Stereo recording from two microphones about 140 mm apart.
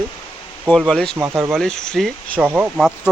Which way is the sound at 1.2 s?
15° right (ahead or behind).